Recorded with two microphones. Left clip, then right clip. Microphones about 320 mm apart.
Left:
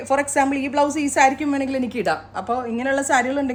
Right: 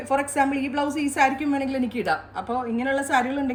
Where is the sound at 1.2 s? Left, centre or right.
Left.